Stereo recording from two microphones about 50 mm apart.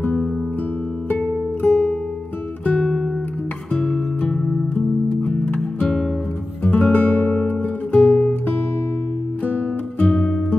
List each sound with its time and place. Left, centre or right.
1.7 s music: centre
2.8 s guitar: centre
3.7 s music: centre
4.7 s music: left
6.6 s music: left
9.5 s music: left
10.1 s music: centre